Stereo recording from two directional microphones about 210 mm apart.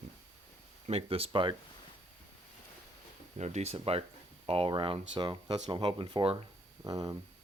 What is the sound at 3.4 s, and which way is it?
Speech, 30° right (ahead or behind).